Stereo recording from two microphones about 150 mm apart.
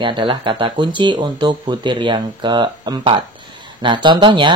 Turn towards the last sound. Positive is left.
turn(degrees=-30)  # may be behind; listen again after turning